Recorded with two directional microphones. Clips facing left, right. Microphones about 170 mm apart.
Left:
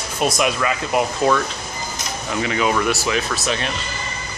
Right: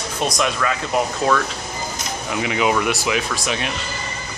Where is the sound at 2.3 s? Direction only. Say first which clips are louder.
Even; 15° right (ahead or behind).